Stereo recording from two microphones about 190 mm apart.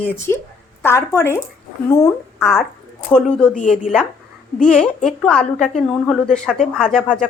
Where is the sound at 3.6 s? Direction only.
40° left (ahead or behind).